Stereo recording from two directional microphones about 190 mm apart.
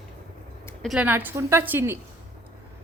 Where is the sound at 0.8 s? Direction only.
5° right (ahead or behind).